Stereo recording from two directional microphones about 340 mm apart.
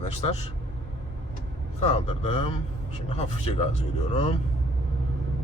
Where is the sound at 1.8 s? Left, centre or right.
Centre.